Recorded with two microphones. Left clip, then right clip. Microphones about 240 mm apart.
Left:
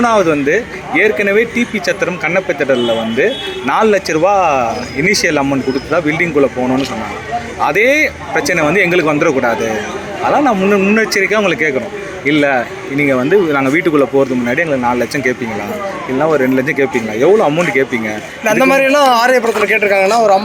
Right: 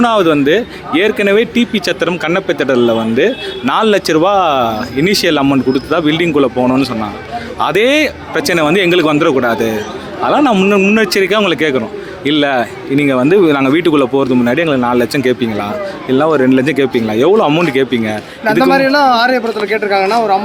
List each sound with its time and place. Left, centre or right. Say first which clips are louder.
0.0 s a man's voice: right 1 dB; right
7.6 s a man's voice: even; right
18.4 s a man's voice: even; centre